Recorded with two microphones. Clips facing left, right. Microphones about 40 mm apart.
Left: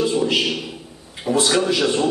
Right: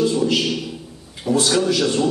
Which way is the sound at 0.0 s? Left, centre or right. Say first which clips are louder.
Right 1 dB; centre.